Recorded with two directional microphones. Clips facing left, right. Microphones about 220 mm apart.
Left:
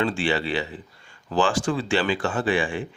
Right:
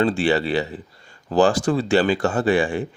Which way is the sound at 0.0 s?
40° right (ahead or behind).